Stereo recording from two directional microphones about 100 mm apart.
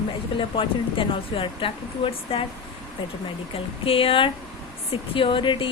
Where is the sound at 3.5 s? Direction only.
70° left (ahead or behind).